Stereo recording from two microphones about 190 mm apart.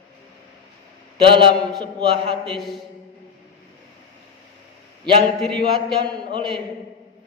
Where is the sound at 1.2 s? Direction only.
25° right (ahead or behind).